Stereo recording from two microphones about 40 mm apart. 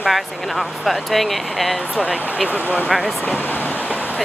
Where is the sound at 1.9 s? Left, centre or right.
Right.